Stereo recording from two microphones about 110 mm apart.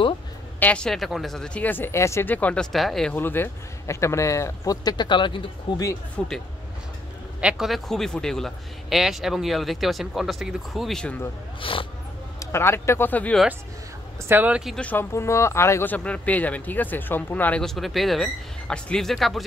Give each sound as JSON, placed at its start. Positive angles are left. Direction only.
{"t": 0.6, "sound": "speech", "side_deg": 10}
{"t": 3.2, "sound": "a man's voice", "side_deg": 20}
{"t": 6.1, "sound": "a man's voice", "side_deg": 5}
{"t": 7.3, "sound": "a man's voice", "side_deg": -5}
{"t": 11.6, "sound": "speech", "side_deg": 50}
{"t": 12.4, "sound": "a man's voice", "side_deg": 25}
{"t": 14.3, "sound": "speech", "side_deg": -15}
{"t": 14.8, "sound": "speech", "side_deg": 15}
{"t": 15.1, "sound": "speech", "side_deg": 25}
{"t": 17.6, "sound": "a man's voice", "side_deg": 0}